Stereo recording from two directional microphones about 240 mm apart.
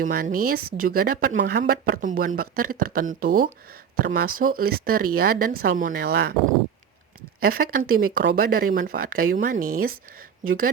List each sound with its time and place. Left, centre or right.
0.0 s speech: right
7.4 s speech: right